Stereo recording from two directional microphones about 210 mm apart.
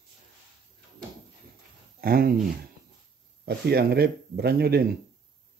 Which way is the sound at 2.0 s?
45° right (ahead or behind).